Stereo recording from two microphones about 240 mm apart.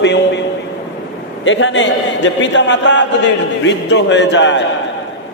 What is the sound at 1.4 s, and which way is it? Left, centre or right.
A man's voice, left.